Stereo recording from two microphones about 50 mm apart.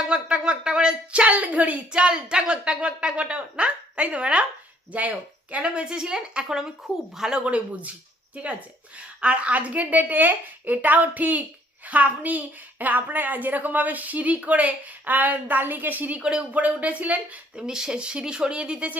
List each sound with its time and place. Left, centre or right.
0.0 s speech: right
7.4 s speech: right
9.0 s speech: right
16.1 s speech: centre
16.6 s speech: right
17.6 s speech: centre